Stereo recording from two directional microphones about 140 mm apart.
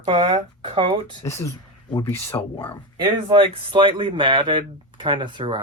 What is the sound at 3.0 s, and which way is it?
Speech, 35° right (ahead or behind).